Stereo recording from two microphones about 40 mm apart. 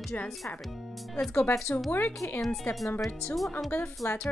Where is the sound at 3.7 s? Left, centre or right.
Left.